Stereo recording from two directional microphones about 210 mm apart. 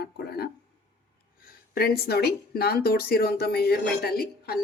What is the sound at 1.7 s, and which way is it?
Speech, 50° left (ahead or behind).